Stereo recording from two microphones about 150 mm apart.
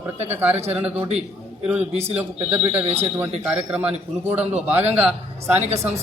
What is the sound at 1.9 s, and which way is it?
Speech, 45° right (ahead or behind).